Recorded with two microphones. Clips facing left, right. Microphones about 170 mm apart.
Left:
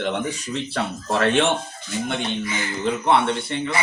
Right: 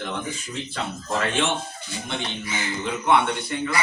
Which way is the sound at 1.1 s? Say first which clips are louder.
Left 6 dB; 70° left (ahead or behind).